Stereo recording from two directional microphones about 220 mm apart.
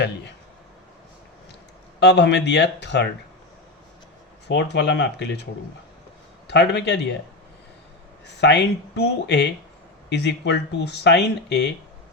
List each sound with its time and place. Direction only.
2.0 s speech: 50° left (ahead or behind)
4.4 s speech: 50° left (ahead or behind)
6.5 s speech: 50° left (ahead or behind)
8.4 s speech: 50° left (ahead or behind)